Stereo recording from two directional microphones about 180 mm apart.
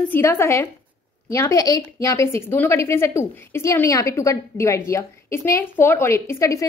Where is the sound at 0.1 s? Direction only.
15° left (ahead or behind).